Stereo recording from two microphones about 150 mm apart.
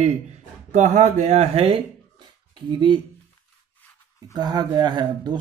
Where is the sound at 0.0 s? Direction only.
50° right (ahead or behind); by 3.0 s 30° right (ahead or behind).